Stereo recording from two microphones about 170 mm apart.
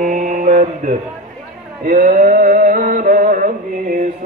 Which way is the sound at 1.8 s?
50° right (ahead or behind).